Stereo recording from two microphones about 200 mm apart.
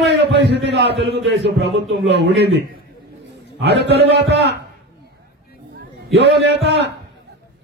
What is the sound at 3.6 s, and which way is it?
A man's voice, 60° right (ahead or behind).